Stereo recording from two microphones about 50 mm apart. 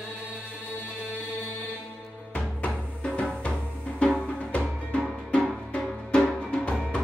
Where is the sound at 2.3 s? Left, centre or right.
Left.